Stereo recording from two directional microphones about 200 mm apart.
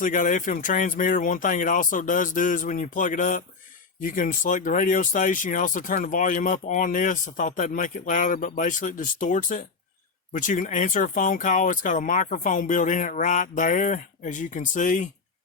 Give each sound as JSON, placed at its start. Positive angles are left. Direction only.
{"t": 0.0, "sound": "speech", "side_deg": 40}